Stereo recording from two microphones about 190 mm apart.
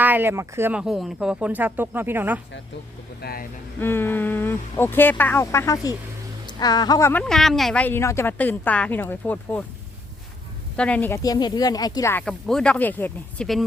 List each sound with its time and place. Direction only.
0.0 s speech: 10° right (ahead or behind)
3.2 s speech: 55° left (ahead or behind)
3.8 s speech: 10° left (ahead or behind)
7.1 s speech: 5° left (ahead or behind)
10.8 s speech: 5° left (ahead or behind)
12.2 s speech: 5° left (ahead or behind)